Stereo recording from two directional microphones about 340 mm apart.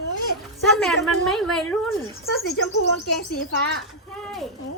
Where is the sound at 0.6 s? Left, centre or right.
Centre.